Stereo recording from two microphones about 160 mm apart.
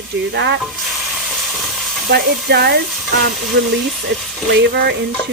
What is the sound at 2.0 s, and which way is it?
Speech, 85° right.